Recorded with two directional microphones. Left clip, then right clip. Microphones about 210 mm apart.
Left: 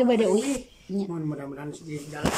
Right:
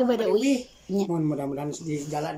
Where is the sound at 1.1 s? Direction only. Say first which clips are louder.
Right 6 dB; 25° right (ahead or behind).